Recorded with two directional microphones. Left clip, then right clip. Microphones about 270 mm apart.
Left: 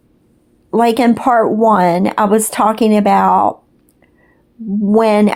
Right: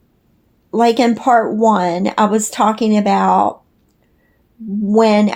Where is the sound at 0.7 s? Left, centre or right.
Left.